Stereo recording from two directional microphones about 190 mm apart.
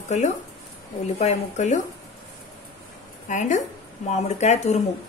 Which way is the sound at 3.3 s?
40° left (ahead or behind).